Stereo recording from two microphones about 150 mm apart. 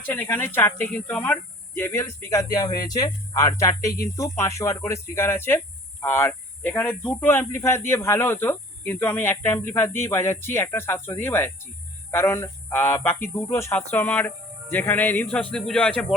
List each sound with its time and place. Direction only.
0.0 s speech: 10° left (ahead or behind)